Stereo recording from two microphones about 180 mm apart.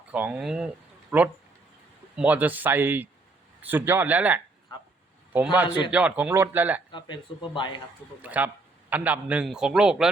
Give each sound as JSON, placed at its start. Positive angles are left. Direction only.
{"t": 0.1, "sound": "a man's voice", "side_deg": -10}
{"t": 5.5, "sound": "speech", "side_deg": -10}
{"t": 6.9, "sound": "speech", "side_deg": 25}
{"t": 8.2, "sound": "a man's voice", "side_deg": -10}